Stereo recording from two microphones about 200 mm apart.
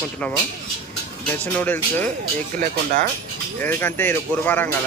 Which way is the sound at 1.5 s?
10° left (ahead or behind).